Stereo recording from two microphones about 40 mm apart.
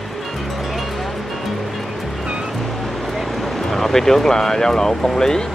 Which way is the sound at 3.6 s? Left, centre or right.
Centre.